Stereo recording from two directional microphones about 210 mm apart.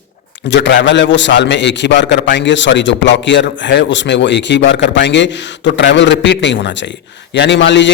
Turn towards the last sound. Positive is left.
turn(degrees=55)  # may be behind; listen again after turning